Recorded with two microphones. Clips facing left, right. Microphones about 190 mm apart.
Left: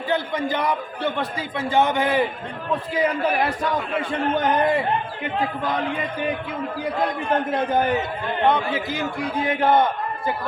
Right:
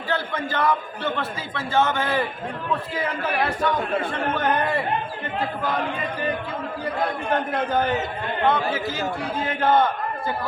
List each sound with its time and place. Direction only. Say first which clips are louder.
0.1 s a man's voice: left 3 dB; 15° left (ahead or behind)
4.1 s a man's voice: left 2 dB; 15° left (ahead or behind)
7.7 s a man's voice: left 1 dB; 15° left (ahead or behind)